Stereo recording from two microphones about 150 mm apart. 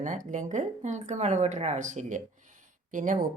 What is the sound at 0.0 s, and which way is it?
Speech, 55° right (ahead or behind).